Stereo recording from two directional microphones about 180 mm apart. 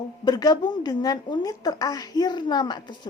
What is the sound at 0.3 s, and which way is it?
A woman's voice, 20° left (ahead or behind).